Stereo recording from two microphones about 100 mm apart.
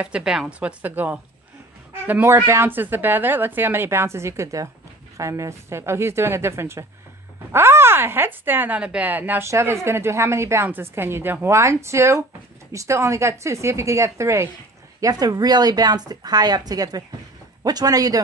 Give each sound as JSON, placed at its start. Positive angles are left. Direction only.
{"t": 0.0, "sound": "a woman's voice", "side_deg": -10}
{"t": 2.2, "sound": "a woman's voice", "side_deg": -30}